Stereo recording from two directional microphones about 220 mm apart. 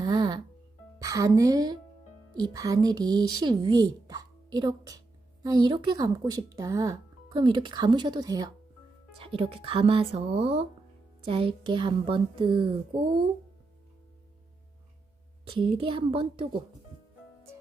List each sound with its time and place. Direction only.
0.0 s music: 20° right (ahead or behind)
0.9 s a woman's voice: 15° right (ahead or behind)
15.4 s speech: 20° right (ahead or behind)